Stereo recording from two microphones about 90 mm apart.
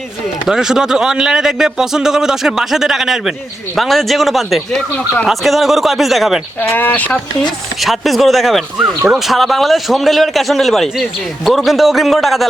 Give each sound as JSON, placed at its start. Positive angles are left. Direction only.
{"t": 0.4, "sound": "speech", "side_deg": -5}
{"t": 6.7, "sound": "speech", "side_deg": 20}
{"t": 7.8, "sound": "speech", "side_deg": 0}